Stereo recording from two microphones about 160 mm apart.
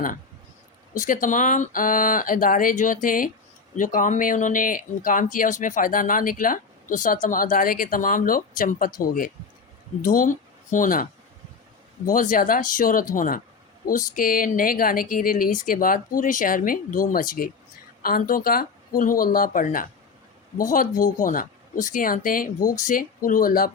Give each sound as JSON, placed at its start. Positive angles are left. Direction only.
{"t": 0.9, "sound": "speech", "side_deg": 55}
{"t": 12.0, "sound": "speech", "side_deg": 60}